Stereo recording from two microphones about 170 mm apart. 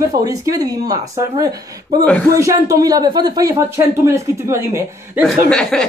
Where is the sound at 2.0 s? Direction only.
5° left (ahead or behind).